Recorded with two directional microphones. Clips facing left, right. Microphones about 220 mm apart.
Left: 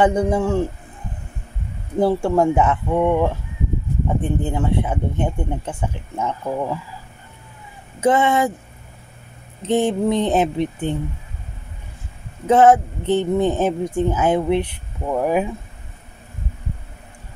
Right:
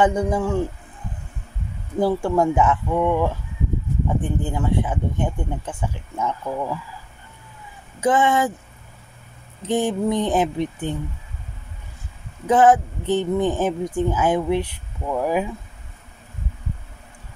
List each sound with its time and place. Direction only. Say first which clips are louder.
0.0 s speech: left 2 dB; 25° left (ahead or behind)
2.0 s speech: left 2 dB; 25° left (ahead or behind)
8.0 s speech: left 2 dB; 25° left (ahead or behind)
9.6 s speech: left 3 dB; 25° left (ahead or behind)
12.4 s speech: left 2 dB; 25° left (ahead or behind)